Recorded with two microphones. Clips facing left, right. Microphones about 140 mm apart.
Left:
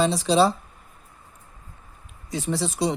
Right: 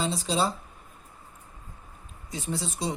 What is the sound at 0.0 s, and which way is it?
Speech, 75° left (ahead or behind).